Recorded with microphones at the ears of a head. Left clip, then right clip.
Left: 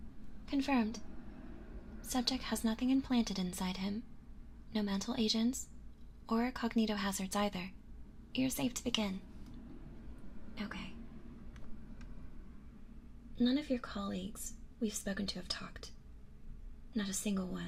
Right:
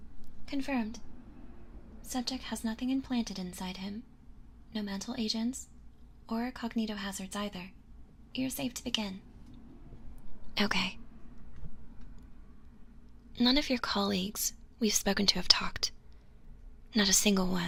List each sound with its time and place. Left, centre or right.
0.5 s a woman's voice: centre
2.0 s a woman's voice: centre
10.5 s a woman's voice: right
13.3 s a woman's voice: right